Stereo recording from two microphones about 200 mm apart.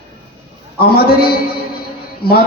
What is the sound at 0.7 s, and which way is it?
Speech, 50° left (ahead or behind).